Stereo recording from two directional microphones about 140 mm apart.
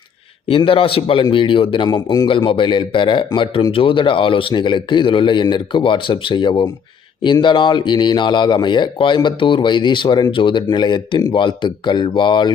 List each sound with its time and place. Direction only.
0.4 s a man's voice: 40° left (ahead or behind)